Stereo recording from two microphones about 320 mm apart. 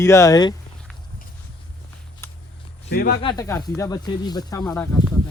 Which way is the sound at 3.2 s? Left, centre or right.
Centre.